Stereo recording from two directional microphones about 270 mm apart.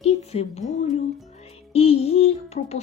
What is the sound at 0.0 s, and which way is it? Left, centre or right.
Speech, left.